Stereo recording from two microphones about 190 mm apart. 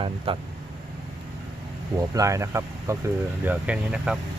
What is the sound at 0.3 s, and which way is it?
Speech, 30° right (ahead or behind).